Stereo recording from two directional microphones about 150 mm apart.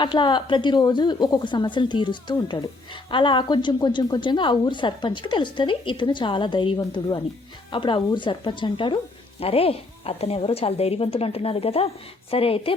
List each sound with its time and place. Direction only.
0.0 s a woman's voice: 30° left (ahead or behind)